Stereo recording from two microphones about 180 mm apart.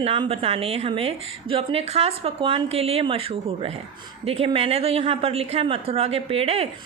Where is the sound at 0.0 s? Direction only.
30° right (ahead or behind).